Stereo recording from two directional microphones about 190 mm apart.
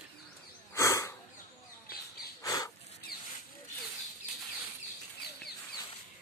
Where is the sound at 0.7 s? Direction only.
15° left (ahead or behind).